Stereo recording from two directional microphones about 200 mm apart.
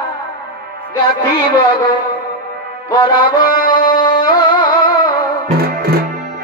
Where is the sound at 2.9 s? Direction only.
25° left (ahead or behind).